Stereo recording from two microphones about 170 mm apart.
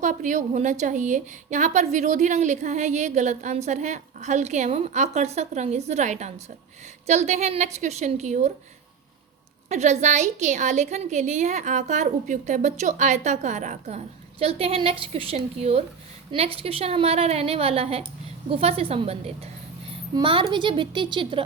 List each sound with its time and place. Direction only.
0.0 s a woman's voice: 50° right (ahead or behind)
9.6 s a woman's voice: 40° right (ahead or behind)